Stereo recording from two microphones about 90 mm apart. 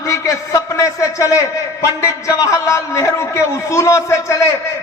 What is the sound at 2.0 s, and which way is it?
A man's voice, 35° left (ahead or behind).